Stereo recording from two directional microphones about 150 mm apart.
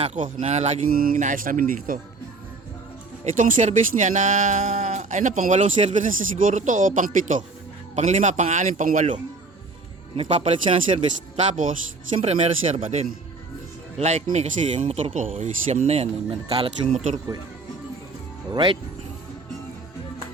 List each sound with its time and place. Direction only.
0.0 s speech: 55° right (ahead or behind)
0.9 s speech: 75° right (ahead or behind)
3.3 s speech: 60° right (ahead or behind)
7.9 s speech: 50° right (ahead or behind)
10.2 s speech: 45° right (ahead or behind)
11.4 s speech: 60° right (ahead or behind)
12.1 s speech: 45° right (ahead or behind)
18.5 s speech: 35° right (ahead or behind)